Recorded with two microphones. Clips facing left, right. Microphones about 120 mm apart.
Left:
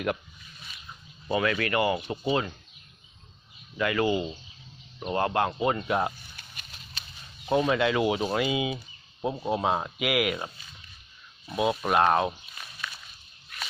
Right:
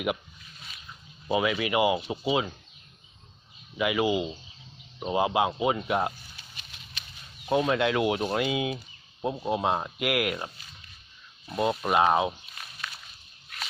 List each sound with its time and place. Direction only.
1.3 s speech: 15° right (ahead or behind)
3.8 s speech: 10° right (ahead or behind)
6.3 s pig: 50° left (ahead or behind)
7.4 s speech: centre (ahead or behind)
11.5 s speech: centre (ahead or behind)